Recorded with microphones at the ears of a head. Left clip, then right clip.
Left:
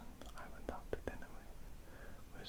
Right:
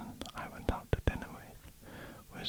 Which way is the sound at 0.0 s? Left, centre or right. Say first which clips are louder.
Right 10 dB; right.